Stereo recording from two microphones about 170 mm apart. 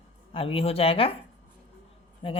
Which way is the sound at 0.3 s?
35° left (ahead or behind).